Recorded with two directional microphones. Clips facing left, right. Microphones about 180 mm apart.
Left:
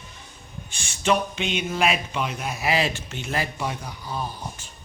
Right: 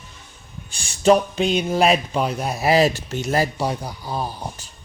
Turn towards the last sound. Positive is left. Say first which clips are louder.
# right 4 dB
turn(degrees=-35)  # may be behind; listen again after turning